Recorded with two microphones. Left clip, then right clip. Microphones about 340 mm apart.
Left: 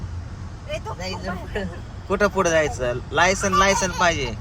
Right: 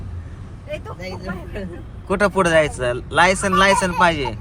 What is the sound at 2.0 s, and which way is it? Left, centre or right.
Speech, right.